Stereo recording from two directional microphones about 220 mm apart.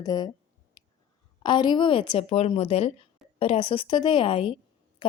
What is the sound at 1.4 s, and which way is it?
A woman's voice, 20° left (ahead or behind).